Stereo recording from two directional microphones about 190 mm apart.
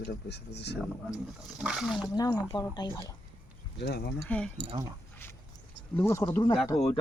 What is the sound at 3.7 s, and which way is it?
Speech, 55° left (ahead or behind).